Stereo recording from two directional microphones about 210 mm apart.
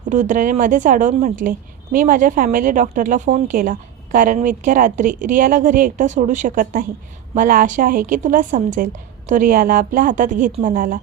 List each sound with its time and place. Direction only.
0.1 s a woman's voice: 35° right (ahead or behind)